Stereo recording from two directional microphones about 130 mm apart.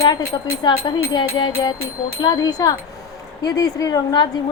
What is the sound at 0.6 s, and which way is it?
Music, 35° left (ahead or behind).